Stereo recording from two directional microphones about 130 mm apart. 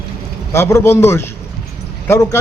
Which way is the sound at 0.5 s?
20° left (ahead or behind).